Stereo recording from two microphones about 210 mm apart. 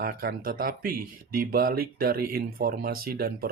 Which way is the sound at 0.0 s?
45° right (ahead or behind).